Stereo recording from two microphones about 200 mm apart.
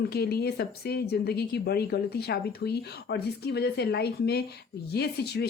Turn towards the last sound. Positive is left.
turn(degrees=55)  # may be behind; listen again after turning